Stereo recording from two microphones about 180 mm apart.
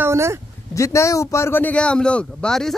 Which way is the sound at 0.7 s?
15° left (ahead or behind).